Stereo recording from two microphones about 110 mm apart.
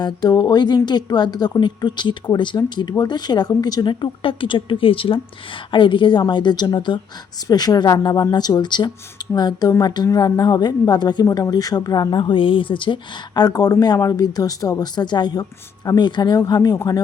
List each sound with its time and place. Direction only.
0.0 s a woman's voice: 40° left (ahead or behind)